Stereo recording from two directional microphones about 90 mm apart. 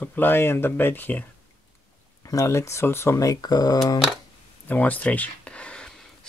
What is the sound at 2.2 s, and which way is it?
Speech, 35° left (ahead or behind).